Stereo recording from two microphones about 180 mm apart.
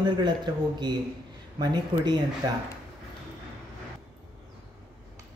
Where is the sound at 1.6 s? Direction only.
25° right (ahead or behind).